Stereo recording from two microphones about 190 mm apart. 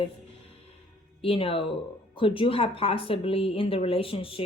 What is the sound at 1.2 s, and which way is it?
A woman's voice, 30° left (ahead or behind).